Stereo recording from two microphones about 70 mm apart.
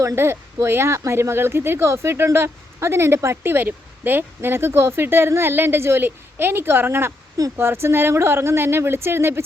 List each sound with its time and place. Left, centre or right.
0.2 s speech: right